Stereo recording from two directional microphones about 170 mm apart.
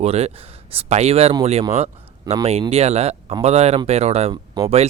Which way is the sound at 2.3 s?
20° right (ahead or behind).